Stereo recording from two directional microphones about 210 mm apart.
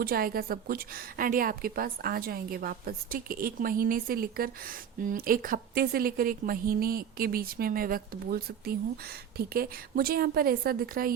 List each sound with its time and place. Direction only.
0.0 s a woman's voice: 45° right (ahead or behind)